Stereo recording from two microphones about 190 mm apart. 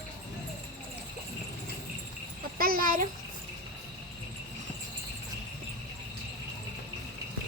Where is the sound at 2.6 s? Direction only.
50° right (ahead or behind).